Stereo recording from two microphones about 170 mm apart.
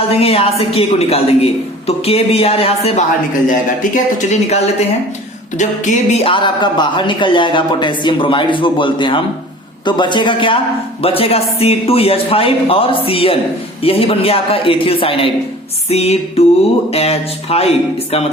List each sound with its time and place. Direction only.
0.1 s speech: 35° left (ahead or behind)
3.5 s speech: 45° left (ahead or behind)